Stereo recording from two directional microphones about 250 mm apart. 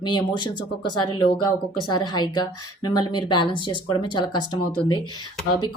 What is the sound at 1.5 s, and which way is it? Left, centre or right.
A woman's voice, centre.